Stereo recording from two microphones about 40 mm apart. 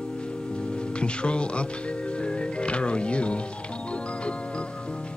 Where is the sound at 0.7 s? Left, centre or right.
Left.